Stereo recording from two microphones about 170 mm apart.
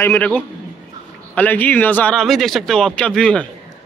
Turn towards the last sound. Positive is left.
turn(degrees=5)  # may be behind; listen again after turning